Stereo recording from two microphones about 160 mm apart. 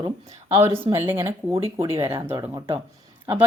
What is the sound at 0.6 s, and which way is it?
Speech, 40° right (ahead or behind).